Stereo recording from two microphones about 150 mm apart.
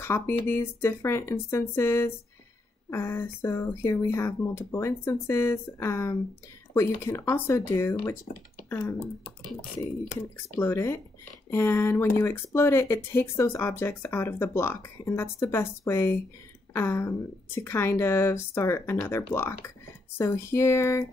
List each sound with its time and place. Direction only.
0.0 s speech: 15° left (ahead or behind)
10.5 s speech: 15° left (ahead or behind)